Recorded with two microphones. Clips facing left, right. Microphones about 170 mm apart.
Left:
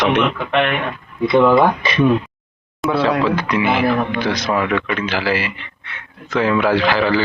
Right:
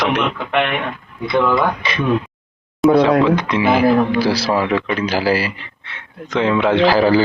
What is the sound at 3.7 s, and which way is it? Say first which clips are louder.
A man's voice: right 6 dB; 40° right (ahead or behind).